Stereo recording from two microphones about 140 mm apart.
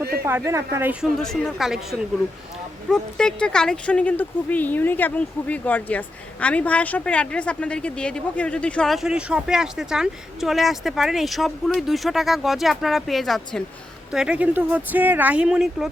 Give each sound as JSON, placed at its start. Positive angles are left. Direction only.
{"t": 0.3, "sound": "speech", "side_deg": -20}
{"t": 1.0, "sound": "speech", "side_deg": 0}